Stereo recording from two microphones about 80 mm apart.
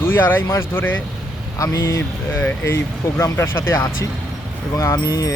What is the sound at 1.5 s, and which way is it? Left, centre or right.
Speech, left.